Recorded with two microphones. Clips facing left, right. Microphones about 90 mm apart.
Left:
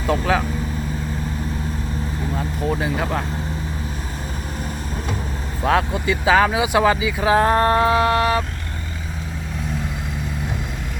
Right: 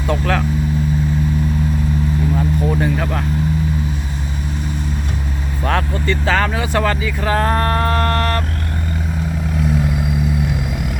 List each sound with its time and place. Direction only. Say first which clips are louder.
0.1 s speech: even; 5° left (ahead or behind)
2.3 s speech: right 1 dB; centre (ahead or behind)
5.6 s speech: left 1 dB; 5° left (ahead or behind)